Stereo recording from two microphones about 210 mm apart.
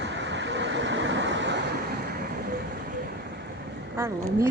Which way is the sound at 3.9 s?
15° right (ahead or behind).